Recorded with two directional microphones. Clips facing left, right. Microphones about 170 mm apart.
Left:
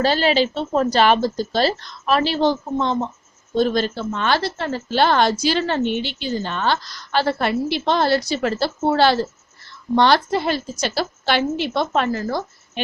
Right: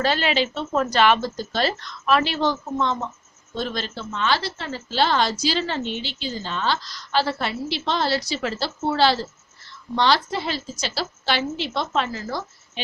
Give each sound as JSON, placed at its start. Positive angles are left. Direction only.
{"t": 0.0, "sound": "a woman's voice", "side_deg": 35}
{"t": 3.5, "sound": "a woman's voice", "side_deg": 45}